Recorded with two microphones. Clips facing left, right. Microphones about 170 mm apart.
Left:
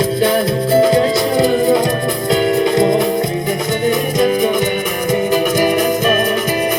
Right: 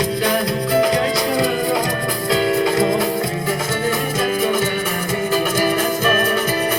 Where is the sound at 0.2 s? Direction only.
30° left (ahead or behind).